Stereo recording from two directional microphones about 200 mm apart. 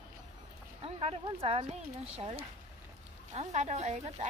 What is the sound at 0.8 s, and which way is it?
Speech, 30° right (ahead or behind).